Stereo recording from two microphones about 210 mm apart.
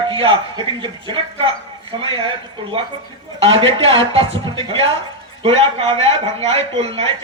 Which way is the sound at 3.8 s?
25° right (ahead or behind).